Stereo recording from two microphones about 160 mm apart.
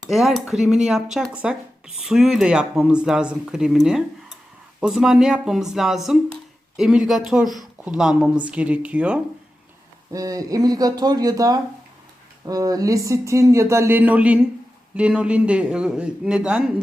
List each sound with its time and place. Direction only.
0.1 s a man's voice: centre (ahead or behind)
10.1 s a man's voice: 20° right (ahead or behind); by 16.8 s 5° right (ahead or behind)